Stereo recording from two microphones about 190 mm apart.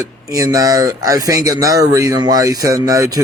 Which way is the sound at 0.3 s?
20° right (ahead or behind).